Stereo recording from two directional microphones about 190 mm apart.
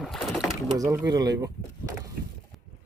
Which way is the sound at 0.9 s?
20° right (ahead or behind).